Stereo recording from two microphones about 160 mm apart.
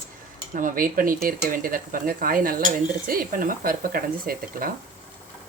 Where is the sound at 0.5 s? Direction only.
60° right (ahead or behind).